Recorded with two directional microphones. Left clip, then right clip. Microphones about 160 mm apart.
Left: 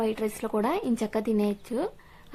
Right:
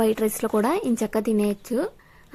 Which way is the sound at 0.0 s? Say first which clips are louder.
Right 6 dB; 30° right (ahead or behind).